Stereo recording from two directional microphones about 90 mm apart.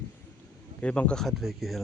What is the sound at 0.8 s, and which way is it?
Speech, 15° left (ahead or behind).